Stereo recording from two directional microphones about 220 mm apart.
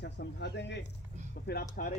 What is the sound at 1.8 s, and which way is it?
Speech, 40° left (ahead or behind).